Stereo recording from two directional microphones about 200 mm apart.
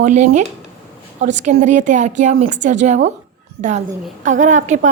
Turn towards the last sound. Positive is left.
turn(degrees=-40)  # may be behind; listen again after turning